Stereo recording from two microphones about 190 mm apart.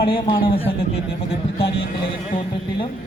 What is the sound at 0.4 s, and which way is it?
A man's voice, 30° left (ahead or behind).